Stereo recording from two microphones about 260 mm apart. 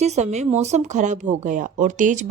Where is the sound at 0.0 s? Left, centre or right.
Right.